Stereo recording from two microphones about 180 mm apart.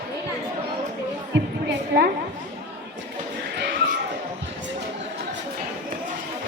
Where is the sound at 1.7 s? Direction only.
60° right (ahead or behind).